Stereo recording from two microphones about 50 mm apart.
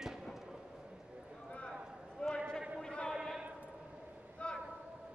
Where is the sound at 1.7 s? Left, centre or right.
Centre.